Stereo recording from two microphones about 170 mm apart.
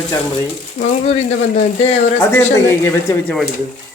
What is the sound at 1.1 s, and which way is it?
Speech, 40° left (ahead or behind).